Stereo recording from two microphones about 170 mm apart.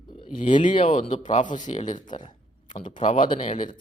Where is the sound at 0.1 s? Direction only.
40° left (ahead or behind).